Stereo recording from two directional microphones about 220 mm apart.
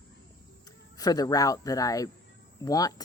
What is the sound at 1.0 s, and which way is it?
Speech, 15° left (ahead or behind).